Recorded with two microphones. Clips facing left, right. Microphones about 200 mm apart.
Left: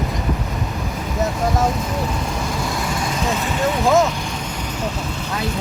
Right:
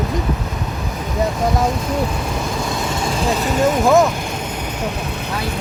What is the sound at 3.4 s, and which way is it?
Speech, 45° right (ahead or behind).